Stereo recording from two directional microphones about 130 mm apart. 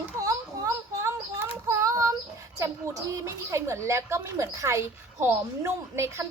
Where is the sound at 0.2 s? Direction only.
25° right (ahead or behind).